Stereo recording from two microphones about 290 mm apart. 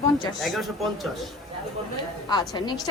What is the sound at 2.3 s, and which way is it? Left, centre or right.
Speech, centre.